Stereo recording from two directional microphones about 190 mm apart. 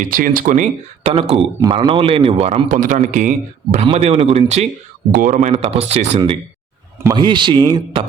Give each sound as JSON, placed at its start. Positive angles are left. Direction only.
{"t": 0.0, "sound": "a man's voice", "side_deg": -45}